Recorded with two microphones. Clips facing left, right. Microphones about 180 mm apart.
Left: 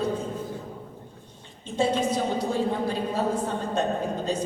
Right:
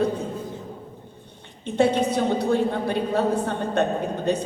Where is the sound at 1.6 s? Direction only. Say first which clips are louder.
Right 4 dB; 65° right (ahead or behind).